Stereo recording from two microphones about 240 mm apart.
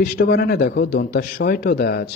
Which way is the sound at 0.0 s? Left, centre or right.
Left.